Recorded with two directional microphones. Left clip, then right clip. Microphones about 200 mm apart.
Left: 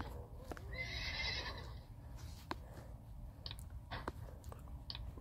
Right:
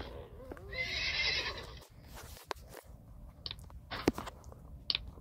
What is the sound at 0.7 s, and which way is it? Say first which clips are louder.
Horse: right 9 dB; 55° right (ahead or behind).